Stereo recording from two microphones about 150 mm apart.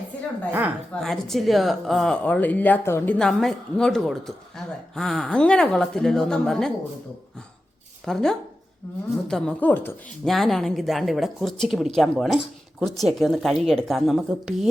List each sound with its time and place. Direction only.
1.0 s speech: centre (ahead or behind)
3.2 s speech: 5° left (ahead or behind)
8.0 s a woman's voice: 5° left (ahead or behind)
10.2 s speech: centre (ahead or behind)